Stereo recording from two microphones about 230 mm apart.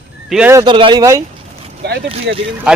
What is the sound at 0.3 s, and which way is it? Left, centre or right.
Speech, centre.